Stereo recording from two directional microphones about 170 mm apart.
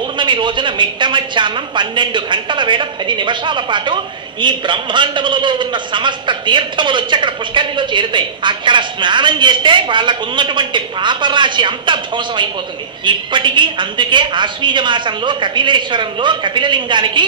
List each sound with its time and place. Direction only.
0.2 s a woman's voice: 30° right (ahead or behind)